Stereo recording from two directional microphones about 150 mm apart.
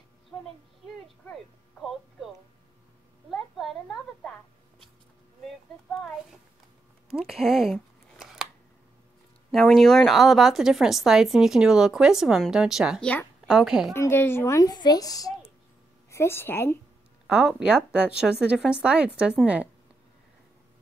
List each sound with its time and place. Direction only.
1.8 s music: centre (ahead or behind)
3.3 s a sound: centre (ahead or behind)
5.4 s speech: 5° left (ahead or behind)
7.1 s a sound: 5° right (ahead or behind)
9.5 s a woman's voice: centre (ahead or behind)
13.0 s a woman's voice: 10° left (ahead or behind)
13.5 s a woman's voice: 5° right (ahead or behind)
13.9 s a child's voice: 15° left (ahead or behind)
17.3 s a woman's voice: 5° right (ahead or behind)